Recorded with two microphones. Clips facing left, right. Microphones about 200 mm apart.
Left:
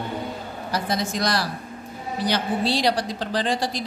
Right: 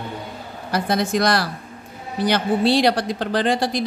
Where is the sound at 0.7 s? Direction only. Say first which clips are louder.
Right 5 dB; 60° right (ahead or behind).